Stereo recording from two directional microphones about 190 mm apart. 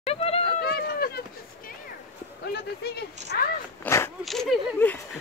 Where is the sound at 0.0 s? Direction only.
30° left (ahead or behind).